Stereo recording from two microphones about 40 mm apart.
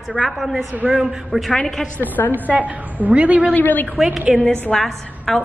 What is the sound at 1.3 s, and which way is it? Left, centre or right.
Speech, right.